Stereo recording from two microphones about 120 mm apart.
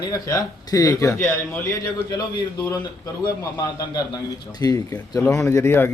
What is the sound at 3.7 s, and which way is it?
Speech, 30° left (ahead or behind).